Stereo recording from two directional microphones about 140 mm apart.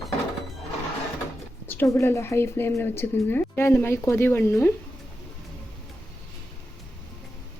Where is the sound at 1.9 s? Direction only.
20° left (ahead or behind).